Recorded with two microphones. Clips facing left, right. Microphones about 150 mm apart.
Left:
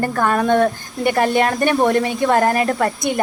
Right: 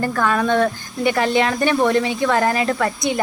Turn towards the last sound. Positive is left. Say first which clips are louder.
# left 1 dB
turn(degrees=50)  # may be behind; listen again after turning